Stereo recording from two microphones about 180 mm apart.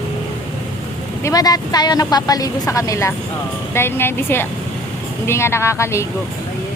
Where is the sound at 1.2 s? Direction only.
20° left (ahead or behind).